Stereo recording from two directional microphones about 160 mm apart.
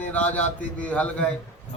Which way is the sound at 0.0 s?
10° left (ahead or behind).